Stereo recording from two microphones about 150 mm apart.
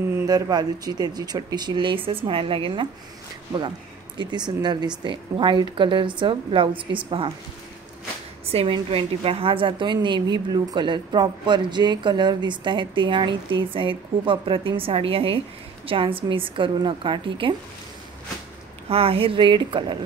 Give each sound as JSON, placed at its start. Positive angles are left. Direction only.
{"t": 0.3, "sound": "speech", "side_deg": -25}
{"t": 4.2, "sound": "a woman's voice", "side_deg": -30}
{"t": 8.5, "sound": "a woman's voice", "side_deg": -40}
{"t": 18.9, "sound": "a woman's voice", "side_deg": -40}